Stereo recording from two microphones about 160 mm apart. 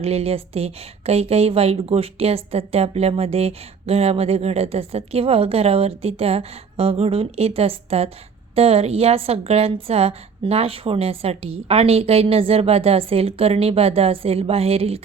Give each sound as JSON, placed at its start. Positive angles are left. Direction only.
{"t": 0.0, "sound": "a woman's voice", "side_deg": -40}